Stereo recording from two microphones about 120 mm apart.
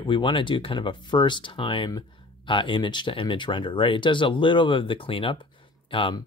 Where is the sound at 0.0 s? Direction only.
45° left (ahead or behind).